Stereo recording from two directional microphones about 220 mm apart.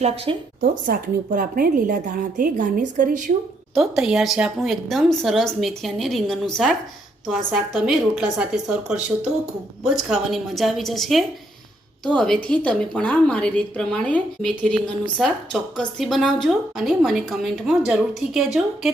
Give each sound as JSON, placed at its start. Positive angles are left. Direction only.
{"t": 0.3, "sound": "a woman's voice", "side_deg": -25}
{"t": 0.6, "sound": "speech", "side_deg": -40}
{"t": 3.8, "sound": "a woman's voice", "side_deg": 0}